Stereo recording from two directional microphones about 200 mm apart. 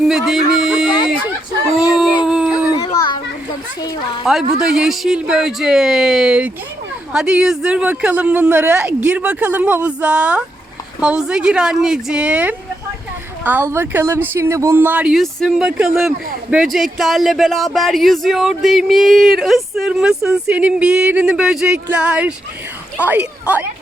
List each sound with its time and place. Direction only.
0.0 s speech: centre (ahead or behind)
2.2 s dog: 5° right (ahead or behind)
2.7 s children playing: 20° left (ahead or behind)
4.3 s speech: centre (ahead or behind)